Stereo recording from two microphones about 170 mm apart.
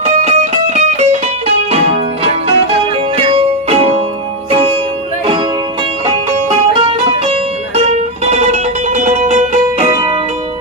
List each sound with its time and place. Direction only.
0.0 s music: 40° right (ahead or behind)
3.2 s music: 35° right (ahead or behind)
6.1 s music: 35° right (ahead or behind)
7.9 s music: 40° right (ahead or behind)